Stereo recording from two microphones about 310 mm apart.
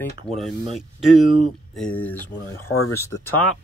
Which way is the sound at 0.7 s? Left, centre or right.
Centre.